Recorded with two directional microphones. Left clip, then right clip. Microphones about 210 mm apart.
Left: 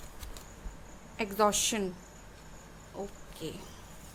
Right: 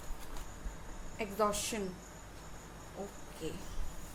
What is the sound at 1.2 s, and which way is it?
Speech, 45° left (ahead or behind).